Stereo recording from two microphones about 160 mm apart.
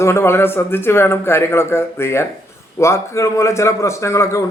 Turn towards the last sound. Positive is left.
turn(degrees=20)  # may be behind; listen again after turning